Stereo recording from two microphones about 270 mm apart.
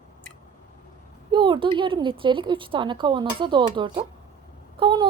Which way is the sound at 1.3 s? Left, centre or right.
Centre.